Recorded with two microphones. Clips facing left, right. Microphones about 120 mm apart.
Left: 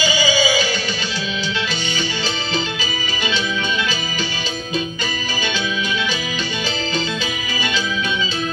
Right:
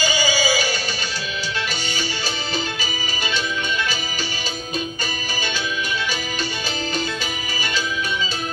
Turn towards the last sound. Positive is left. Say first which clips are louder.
# left 3 dB
turn(degrees=-45)  # may be behind; listen again after turning